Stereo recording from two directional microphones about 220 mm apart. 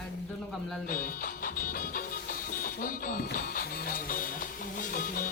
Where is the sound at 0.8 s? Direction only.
40° left (ahead or behind).